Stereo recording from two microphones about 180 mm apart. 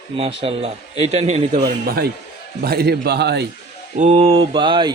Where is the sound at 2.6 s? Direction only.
60° right (ahead or behind).